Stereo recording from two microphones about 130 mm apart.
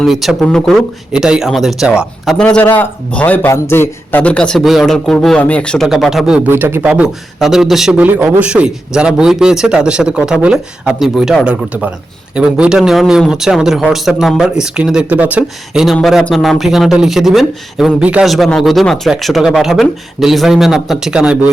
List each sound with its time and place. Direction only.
0.0 s speech: centre (ahead or behind)
1.1 s speech: 5° right (ahead or behind)
6.5 s a man's voice: 20° right (ahead or behind); by 8.0 s 5° right (ahead or behind)
8.0 s speech: 15° right (ahead or behind)